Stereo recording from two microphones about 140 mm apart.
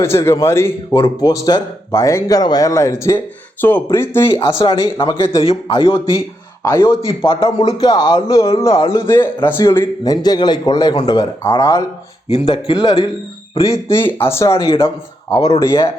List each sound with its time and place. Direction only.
0.0 s a man's voice: 20° left (ahead or behind)
4.6 s a man's voice: 30° left (ahead or behind)
5.4 s a man's voice: 40° left (ahead or behind)
6.6 s a man's voice: 20° left (ahead or behind)
7.3 s a man's voice: 40° left (ahead or behind)
7.7 s a man's voice: 30° left (ahead or behind)